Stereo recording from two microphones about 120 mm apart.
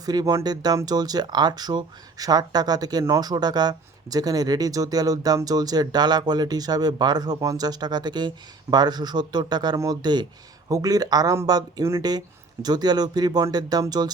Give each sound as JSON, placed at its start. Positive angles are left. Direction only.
{"t": 0.0, "sound": "speech", "side_deg": -35}